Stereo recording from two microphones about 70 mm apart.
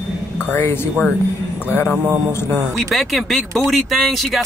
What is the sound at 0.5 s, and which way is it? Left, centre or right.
Speech, left.